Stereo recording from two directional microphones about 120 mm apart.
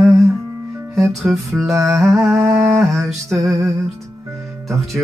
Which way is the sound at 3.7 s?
25° right (ahead or behind).